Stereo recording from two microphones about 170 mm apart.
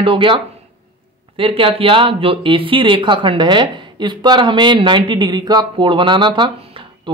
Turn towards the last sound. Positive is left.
turn(degrees=-30)  # may be behind; listen again after turning